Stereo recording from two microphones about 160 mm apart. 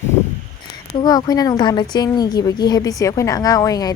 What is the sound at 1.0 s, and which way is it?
A woman's voice, 25° left (ahead or behind).